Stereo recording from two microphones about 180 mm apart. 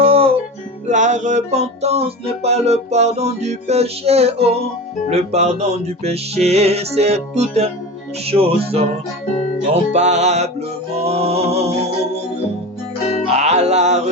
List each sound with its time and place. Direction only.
0.0 s music: 30° right (ahead or behind)
0.9 s music: 45° right (ahead or behind)
9.9 s music: 40° right (ahead or behind)
13.3 s music: 35° right (ahead or behind)